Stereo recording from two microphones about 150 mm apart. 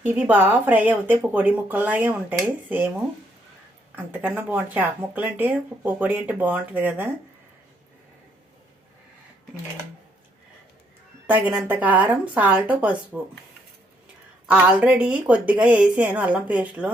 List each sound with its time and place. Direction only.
0.0 s speech: 10° right (ahead or behind)
3.9 s speech: 10° right (ahead or behind)
11.3 s speech: 10° right (ahead or behind)
14.4 s speech: 5° right (ahead or behind)